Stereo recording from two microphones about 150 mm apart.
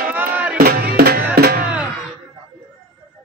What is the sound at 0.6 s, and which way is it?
Music, 90° right.